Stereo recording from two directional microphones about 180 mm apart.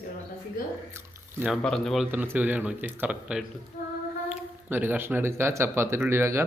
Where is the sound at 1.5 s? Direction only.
Centre (ahead or behind).